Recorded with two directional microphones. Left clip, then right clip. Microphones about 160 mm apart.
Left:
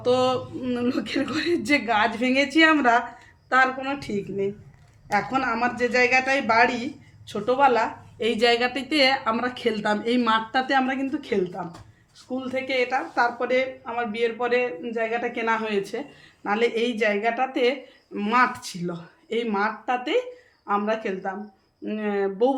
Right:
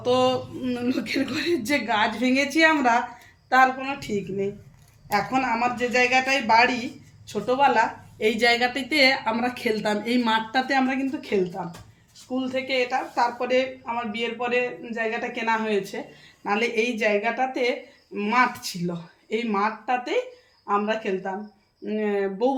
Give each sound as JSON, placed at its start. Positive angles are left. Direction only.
{"t": 0.0, "sound": "a woman's voice", "side_deg": 40}